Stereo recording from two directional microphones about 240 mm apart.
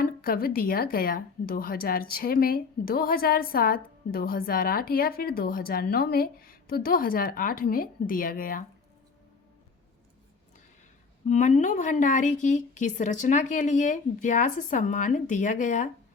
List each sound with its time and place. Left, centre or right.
0.0 s a woman's voice: left
11.3 s a woman's voice: left